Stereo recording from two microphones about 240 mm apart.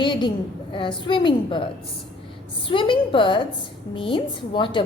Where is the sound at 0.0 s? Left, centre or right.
Centre.